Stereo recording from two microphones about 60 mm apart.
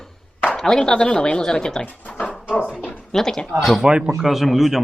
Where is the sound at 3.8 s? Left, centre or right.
Centre.